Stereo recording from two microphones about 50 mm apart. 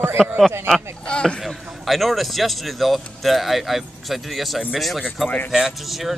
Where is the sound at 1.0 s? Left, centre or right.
Centre.